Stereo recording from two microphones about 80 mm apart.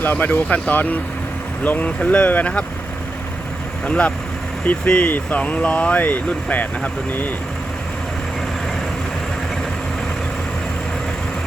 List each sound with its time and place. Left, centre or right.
0.0 s speech: left
3.8 s speech: centre